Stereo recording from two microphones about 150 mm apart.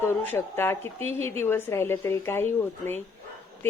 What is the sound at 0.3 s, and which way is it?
A woman's voice, 15° left (ahead or behind).